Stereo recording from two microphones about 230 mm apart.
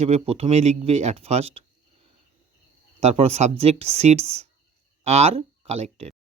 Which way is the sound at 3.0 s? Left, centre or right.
Right.